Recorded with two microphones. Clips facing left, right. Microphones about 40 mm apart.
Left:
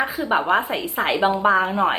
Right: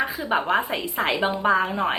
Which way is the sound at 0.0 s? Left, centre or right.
Centre.